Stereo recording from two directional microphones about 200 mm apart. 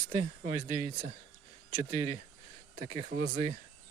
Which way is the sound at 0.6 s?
20° right (ahead or behind).